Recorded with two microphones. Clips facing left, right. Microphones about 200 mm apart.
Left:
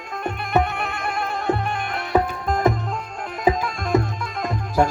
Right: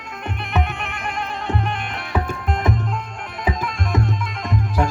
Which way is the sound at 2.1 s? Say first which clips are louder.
Left 4 dB; 40° left (ahead or behind).